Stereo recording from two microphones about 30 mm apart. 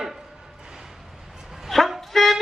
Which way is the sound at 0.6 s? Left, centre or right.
Centre.